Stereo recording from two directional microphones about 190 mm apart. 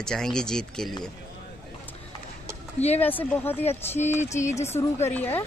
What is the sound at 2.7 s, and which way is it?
Speech, 35° left (ahead or behind).